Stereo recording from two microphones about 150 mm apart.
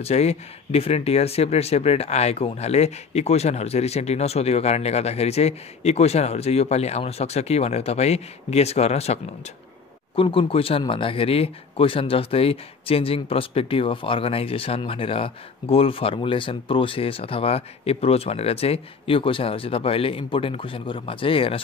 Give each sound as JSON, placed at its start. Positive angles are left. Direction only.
{"t": 0.0, "sound": "speech", "side_deg": 45}